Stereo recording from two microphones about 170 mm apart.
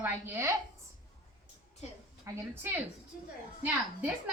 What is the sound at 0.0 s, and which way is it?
Speech, 15° right (ahead or behind).